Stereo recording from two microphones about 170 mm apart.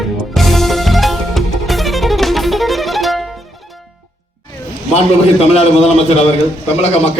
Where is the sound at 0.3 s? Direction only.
Centre (ahead or behind).